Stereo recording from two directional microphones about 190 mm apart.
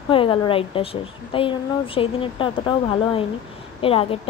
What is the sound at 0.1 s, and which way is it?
A woman's voice, 25° left (ahead or behind).